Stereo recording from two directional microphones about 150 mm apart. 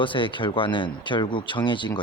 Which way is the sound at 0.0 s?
35° left (ahead or behind).